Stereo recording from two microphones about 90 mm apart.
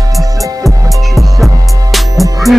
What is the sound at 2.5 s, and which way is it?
Music, 40° right (ahead or behind).